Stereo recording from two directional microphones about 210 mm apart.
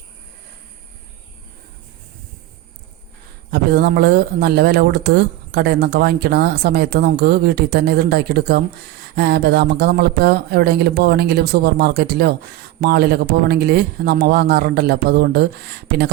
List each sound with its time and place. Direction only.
3.5 s speech: 50° right (ahead or behind)